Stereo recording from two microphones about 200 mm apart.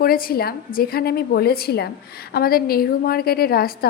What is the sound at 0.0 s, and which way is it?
A woman's voice, 45° left (ahead or behind).